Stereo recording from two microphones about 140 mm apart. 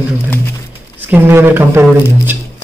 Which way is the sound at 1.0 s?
15° right (ahead or behind).